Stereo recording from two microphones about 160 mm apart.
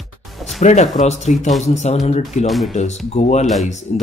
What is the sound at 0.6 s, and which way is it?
Speech, 45° left (ahead or behind).